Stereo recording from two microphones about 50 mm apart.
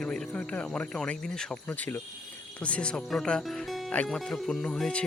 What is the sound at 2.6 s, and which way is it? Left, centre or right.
Speech, left.